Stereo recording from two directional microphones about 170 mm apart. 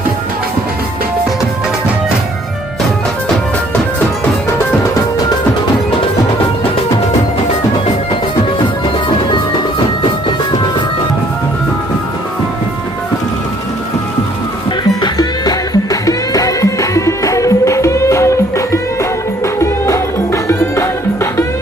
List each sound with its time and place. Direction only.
15.0 s music: 25° left (ahead or behind)